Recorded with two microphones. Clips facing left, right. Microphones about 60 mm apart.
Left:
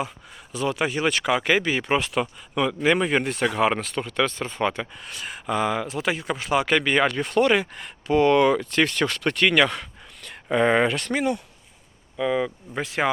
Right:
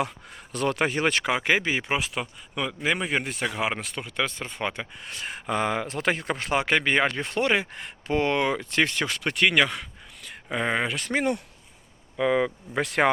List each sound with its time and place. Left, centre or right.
0.5 s speech: right
1.9 s speech: centre
5.0 s speech: right
5.9 s speech: right
6.6 s speech: right; by 11.1 s centre
12.1 s speech: right
12.8 s speech: right